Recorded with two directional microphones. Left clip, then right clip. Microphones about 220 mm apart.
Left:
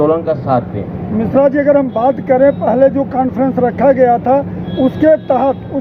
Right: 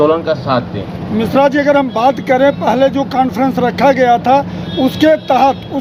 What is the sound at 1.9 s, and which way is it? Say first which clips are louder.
Speech: right 1 dB; 25° right (ahead or behind).